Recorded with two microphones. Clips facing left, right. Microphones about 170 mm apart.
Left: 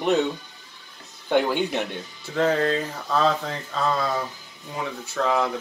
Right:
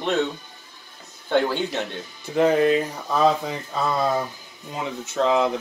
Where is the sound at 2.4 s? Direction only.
15° right (ahead or behind).